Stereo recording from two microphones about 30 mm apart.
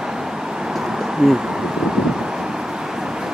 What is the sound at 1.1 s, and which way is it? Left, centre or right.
Speech, centre.